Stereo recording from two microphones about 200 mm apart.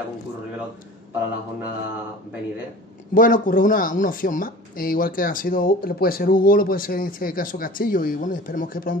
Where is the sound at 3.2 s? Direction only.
45° left (ahead or behind).